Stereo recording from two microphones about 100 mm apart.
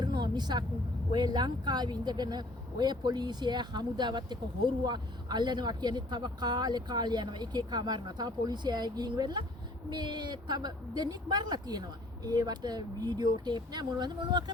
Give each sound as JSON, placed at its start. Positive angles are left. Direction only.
{"t": 0.0, "sound": "vehicle", "side_deg": -45}
{"t": 1.1, "sound": "speech", "side_deg": -45}